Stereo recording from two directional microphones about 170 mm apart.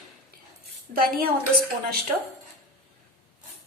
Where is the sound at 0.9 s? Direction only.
65° right (ahead or behind).